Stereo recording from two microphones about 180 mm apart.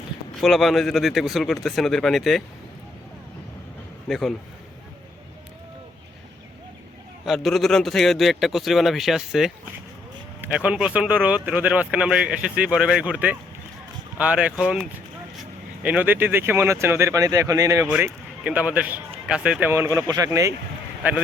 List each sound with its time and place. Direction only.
0.3 s a man's voice: centre (ahead or behind)
4.1 s a man's voice: centre (ahead or behind)
7.3 s a man's voice: centre (ahead or behind); by 17.8 s 20° right (ahead or behind)
18.0 s speech: 5° right (ahead or behind)